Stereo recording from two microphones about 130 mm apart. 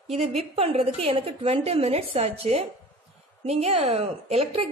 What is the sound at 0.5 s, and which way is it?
A woman's voice, 50° right (ahead or behind).